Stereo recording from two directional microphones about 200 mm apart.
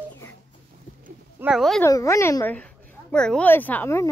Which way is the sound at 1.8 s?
15° left (ahead or behind).